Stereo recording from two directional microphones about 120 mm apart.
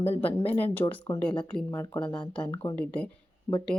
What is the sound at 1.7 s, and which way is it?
Speech, 25° left (ahead or behind).